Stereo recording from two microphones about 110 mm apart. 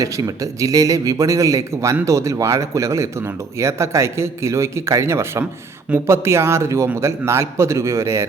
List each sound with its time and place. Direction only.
0.0 s speech: 30° right (ahead or behind)